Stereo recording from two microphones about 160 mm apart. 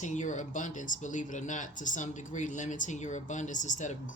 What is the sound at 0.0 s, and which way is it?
Speech, 50° left (ahead or behind).